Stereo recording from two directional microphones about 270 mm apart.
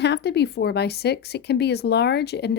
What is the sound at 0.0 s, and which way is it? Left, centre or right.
Speech, left.